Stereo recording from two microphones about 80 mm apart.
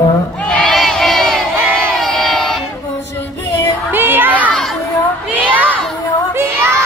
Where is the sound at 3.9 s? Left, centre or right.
Right.